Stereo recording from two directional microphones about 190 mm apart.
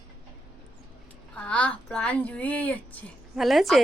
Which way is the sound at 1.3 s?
5° left (ahead or behind).